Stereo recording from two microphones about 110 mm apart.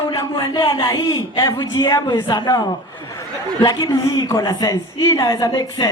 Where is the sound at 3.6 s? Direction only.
40° left (ahead or behind).